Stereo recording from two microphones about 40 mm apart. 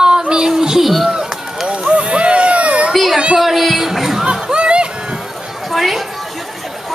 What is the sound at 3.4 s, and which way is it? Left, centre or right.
Speech, centre.